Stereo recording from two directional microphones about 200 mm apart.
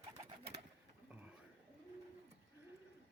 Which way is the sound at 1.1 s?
10° right (ahead or behind).